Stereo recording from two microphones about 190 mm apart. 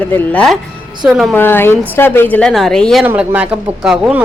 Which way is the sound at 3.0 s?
10° right (ahead or behind).